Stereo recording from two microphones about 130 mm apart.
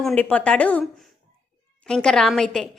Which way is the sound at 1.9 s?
5° left (ahead or behind).